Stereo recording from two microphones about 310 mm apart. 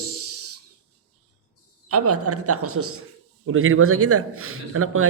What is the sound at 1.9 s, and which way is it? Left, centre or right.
Speech, right.